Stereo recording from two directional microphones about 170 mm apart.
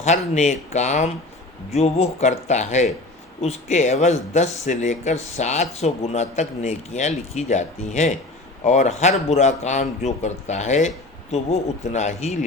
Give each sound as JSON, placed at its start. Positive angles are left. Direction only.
{"t": 0.0, "sound": "speech", "side_deg": 40}